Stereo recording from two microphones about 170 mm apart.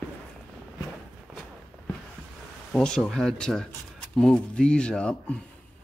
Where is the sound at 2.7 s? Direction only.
5° left (ahead or behind).